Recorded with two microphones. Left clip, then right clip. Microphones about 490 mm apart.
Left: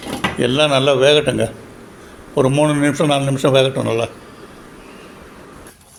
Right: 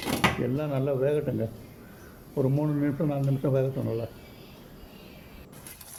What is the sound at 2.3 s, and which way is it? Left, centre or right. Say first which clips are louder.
A man's voice: left 13 dB; right.